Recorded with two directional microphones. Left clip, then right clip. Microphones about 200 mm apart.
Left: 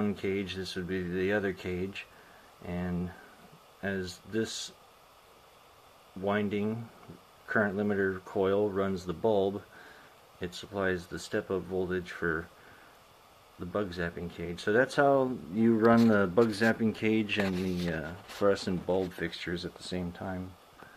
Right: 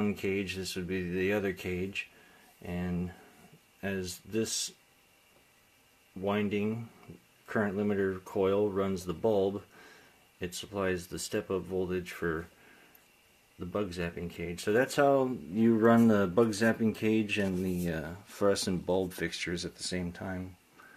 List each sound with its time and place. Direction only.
0.0 s speech: 20° right (ahead or behind)
6.2 s speech: 15° right (ahead or behind)
13.7 s speech: 20° right (ahead or behind)